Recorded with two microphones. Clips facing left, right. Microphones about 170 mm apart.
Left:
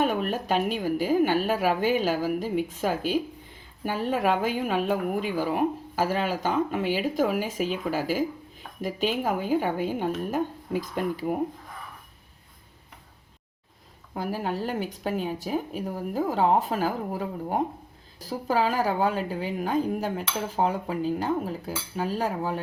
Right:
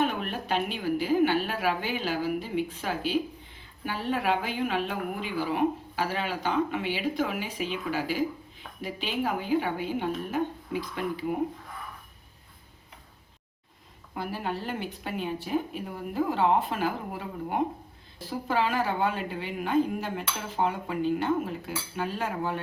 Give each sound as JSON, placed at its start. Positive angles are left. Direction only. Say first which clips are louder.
{"t": 0.3, "sound": "a woman's voice", "louder": "left 4 dB", "side_deg": 45}
{"t": 14.1, "sound": "speech", "louder": "left 3 dB", "side_deg": 40}